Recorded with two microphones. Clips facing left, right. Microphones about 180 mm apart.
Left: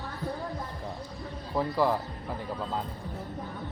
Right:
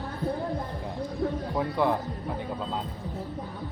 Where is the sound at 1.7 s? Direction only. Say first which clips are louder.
Right 1 dB; 5° left (ahead or behind).